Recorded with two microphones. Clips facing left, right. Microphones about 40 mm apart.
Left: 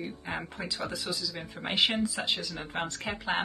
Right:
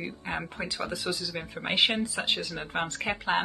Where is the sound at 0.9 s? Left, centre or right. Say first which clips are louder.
Right 2 dB; right.